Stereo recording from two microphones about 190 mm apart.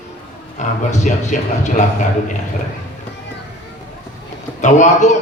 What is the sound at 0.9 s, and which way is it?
Speech, 40° left (ahead or behind).